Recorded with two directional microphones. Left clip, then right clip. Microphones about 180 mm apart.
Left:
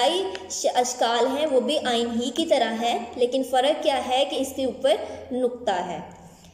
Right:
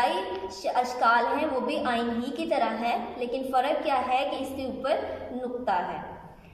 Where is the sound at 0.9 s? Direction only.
30° left (ahead or behind).